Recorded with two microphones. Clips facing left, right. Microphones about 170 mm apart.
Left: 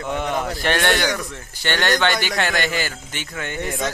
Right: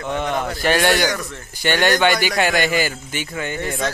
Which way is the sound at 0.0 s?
5° left (ahead or behind).